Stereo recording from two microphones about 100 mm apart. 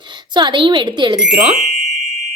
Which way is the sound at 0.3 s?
50° right (ahead or behind).